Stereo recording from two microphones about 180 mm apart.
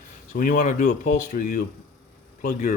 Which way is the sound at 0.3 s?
50° left (ahead or behind).